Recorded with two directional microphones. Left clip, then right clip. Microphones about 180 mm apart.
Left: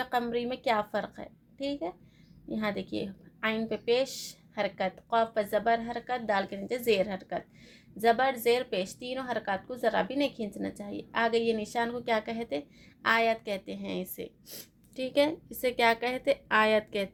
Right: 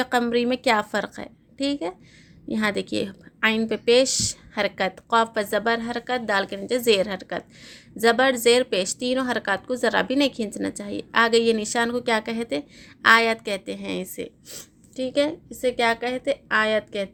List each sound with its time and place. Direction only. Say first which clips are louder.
0.0 s speech: right 8 dB; 35° right (ahead or behind)
14.9 s a woman's voice: right 4 dB; 10° right (ahead or behind)